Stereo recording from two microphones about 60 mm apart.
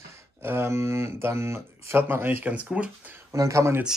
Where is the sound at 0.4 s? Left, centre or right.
Right.